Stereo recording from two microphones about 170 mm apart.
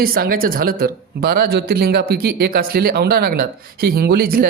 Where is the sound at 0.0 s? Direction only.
60° right (ahead or behind).